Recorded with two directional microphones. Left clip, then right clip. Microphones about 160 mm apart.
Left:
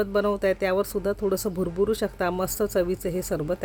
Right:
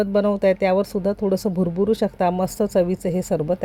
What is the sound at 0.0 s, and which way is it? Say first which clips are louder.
A woman's voice: right 5 dB; 15° right (ahead or behind).